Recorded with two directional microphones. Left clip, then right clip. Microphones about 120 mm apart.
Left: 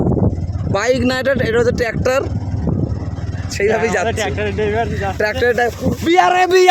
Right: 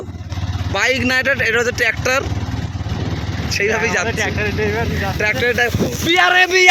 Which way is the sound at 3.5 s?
55° left (ahead or behind).